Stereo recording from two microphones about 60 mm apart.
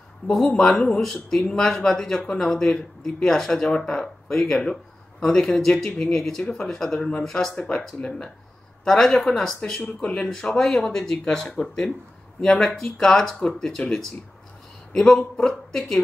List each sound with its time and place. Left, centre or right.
0.2 s speech: left
0.6 s speech: centre
7.0 s speech: left
7.2 s speech: centre
9.6 s speech: centre
15.0 s speech: centre